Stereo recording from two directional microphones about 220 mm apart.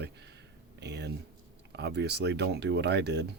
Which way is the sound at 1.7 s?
50° right (ahead or behind).